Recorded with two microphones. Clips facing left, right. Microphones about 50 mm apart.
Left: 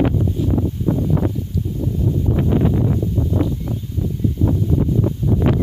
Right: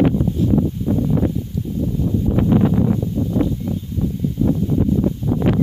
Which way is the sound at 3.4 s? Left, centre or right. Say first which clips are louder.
Right 2 dB; left.